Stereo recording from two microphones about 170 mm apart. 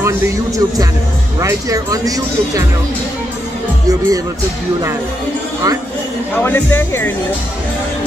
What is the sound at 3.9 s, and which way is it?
Speech, 20° right (ahead or behind).